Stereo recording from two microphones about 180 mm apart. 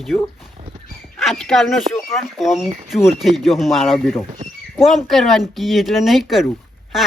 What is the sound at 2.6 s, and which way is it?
Speech, 40° right (ahead or behind).